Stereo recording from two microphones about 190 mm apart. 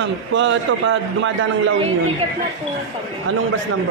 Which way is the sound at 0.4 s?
85° right.